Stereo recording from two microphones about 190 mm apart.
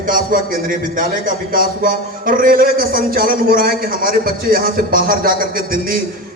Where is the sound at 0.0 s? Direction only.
45° right (ahead or behind).